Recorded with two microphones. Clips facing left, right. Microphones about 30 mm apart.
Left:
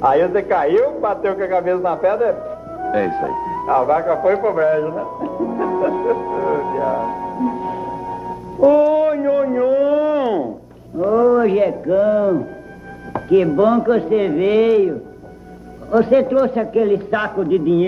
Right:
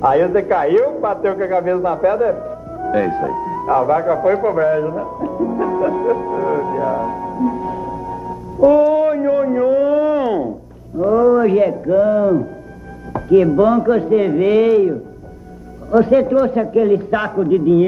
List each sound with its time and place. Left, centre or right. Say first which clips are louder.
0.0 s a man's voice: right 1 dB; centre
3.1 s speech: right 1 dB; centre
3.7 s a man's voice: right 1 dB; centre
5.6 s music: even; centre; by 8.6 s left
8.6 s a man's voice: right 1 dB; centre
13.1 s chopping: right 2 dB; left
14.1 s a man's voice: right 3 dB; centre
15.9 s a man's voice: right 1 dB; centre
17.5 s a man's voice: right 3 dB; left